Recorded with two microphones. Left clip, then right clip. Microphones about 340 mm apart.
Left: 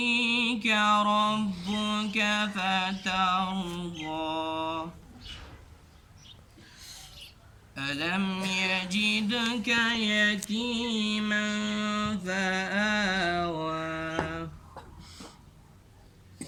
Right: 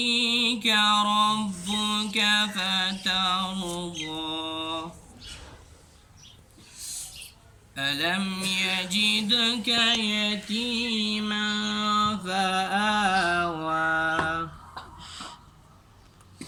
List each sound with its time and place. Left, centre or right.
0.0 s a sound: centre
3.9 s mantra: centre
6.7 s rodents: left
7.8 s mantra: centre
11.4 s mantra: centre
12.2 s mantra: centre
12.7 s a sound: left
13.7 s mantra: centre
14.9 s gasp: centre